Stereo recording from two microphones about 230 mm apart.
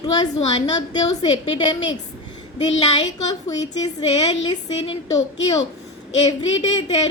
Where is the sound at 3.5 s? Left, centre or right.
Centre.